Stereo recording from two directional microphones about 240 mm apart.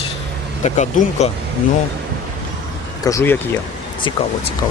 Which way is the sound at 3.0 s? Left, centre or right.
Centre.